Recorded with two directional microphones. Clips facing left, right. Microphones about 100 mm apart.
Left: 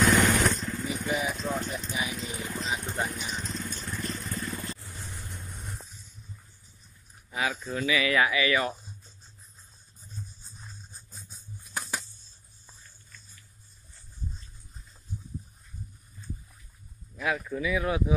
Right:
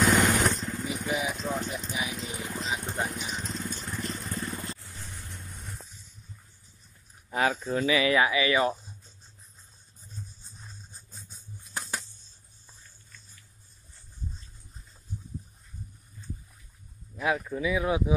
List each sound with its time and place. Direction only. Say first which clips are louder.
0.0 s vehicle: even; 10° right (ahead or behind)
2.6 s a sound: even; 5° right (ahead or behind)
3.1 s vehicle: even; 10° right (ahead or behind)
7.2 s a sound: right 4 dB; 40° right (ahead or behind)
7.7 s speech: right 1 dB; 30° right (ahead or behind)
17.2 s speech: right 2 dB; 20° right (ahead or behind)